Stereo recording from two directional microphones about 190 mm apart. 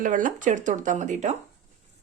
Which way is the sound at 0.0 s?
45° right (ahead or behind).